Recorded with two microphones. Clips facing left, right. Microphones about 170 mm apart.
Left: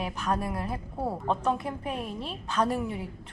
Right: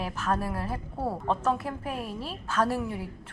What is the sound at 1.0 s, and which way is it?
Speech, centre (ahead or behind).